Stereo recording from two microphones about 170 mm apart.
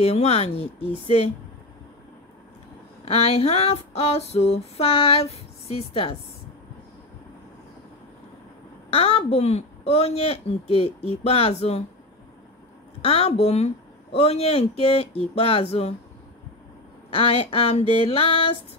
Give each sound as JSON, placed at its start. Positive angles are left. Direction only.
{"t": 0.0, "sound": "female singing", "side_deg": 35}
{"t": 3.1, "sound": "female singing", "side_deg": 35}
{"t": 8.9, "sound": "female singing", "side_deg": 35}
{"t": 13.0, "sound": "female singing", "side_deg": 35}
{"t": 17.1, "sound": "female singing", "side_deg": 35}